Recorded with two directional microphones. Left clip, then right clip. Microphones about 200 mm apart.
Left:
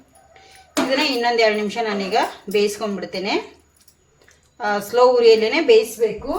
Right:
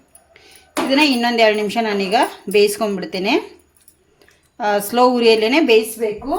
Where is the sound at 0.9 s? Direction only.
50° right (ahead or behind).